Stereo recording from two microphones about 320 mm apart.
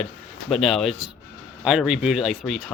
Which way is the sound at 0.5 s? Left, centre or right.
Centre.